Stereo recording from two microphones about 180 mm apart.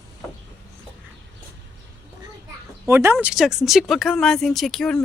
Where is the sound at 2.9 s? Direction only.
15° right (ahead or behind).